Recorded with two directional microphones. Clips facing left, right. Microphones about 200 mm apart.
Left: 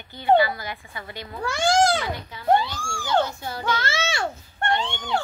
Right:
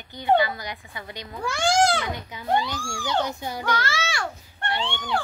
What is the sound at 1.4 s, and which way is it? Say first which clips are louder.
Speech: left 1 dB; 20° left (ahead or behind).